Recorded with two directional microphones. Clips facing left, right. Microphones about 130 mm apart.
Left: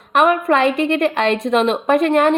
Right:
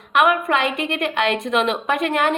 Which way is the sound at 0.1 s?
35° left (ahead or behind).